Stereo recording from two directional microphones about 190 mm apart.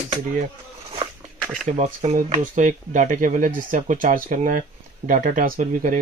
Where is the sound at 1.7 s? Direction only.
35° right (ahead or behind).